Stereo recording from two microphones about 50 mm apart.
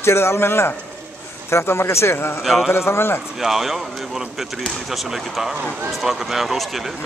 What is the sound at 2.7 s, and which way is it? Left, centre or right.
Speech, left.